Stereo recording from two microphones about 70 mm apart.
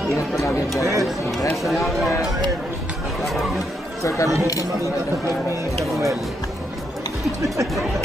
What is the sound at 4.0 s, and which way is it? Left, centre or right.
Speech, left.